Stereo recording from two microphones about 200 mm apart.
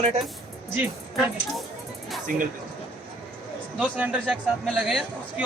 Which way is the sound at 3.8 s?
5° right (ahead or behind).